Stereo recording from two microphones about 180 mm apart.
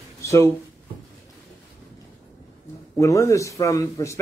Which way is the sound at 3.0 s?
15° left (ahead or behind).